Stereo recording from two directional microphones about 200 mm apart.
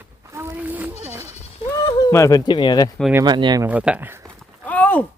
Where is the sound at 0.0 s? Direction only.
15° right (ahead or behind).